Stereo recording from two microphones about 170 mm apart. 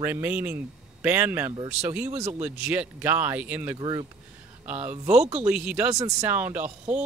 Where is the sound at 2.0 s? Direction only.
40° right (ahead or behind).